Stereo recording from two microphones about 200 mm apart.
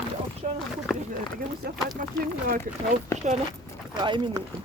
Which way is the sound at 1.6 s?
50° right (ahead or behind).